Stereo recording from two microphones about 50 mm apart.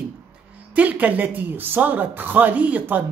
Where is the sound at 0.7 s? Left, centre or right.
Right.